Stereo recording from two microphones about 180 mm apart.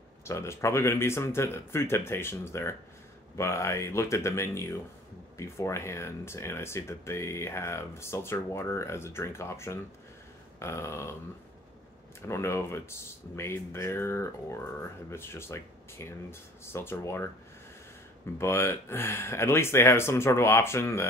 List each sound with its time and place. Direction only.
0.2 s speech: 15° left (ahead or behind)
12.2 s speech: 15° left (ahead or behind)
18.4 s speech: 15° left (ahead or behind)